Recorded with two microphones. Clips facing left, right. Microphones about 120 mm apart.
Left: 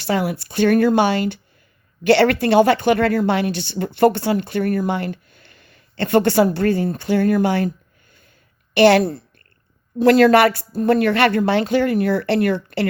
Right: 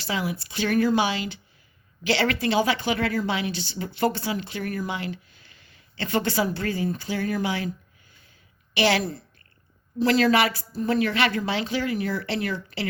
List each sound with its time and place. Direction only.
0.1 s speech: 60° left (ahead or behind)
8.7 s a woman's voice: 55° left (ahead or behind)